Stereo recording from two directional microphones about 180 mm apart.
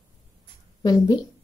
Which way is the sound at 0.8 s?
20° left (ahead or behind).